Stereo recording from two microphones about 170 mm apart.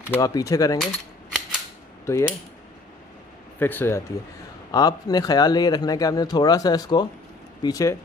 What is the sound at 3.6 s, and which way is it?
Speech, 10° left (ahead or behind).